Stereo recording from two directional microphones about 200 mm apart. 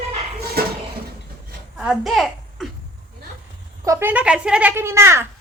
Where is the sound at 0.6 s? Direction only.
50° right (ahead or behind).